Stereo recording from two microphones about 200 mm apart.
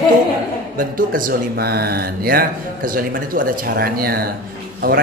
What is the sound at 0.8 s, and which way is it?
Speech, 45° right (ahead or behind).